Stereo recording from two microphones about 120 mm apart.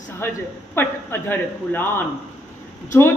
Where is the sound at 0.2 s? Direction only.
20° left (ahead or behind).